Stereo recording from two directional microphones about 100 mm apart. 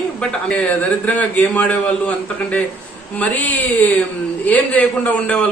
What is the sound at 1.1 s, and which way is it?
A man's voice, 15° left (ahead or behind).